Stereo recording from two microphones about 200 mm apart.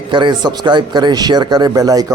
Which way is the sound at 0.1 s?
25° right (ahead or behind).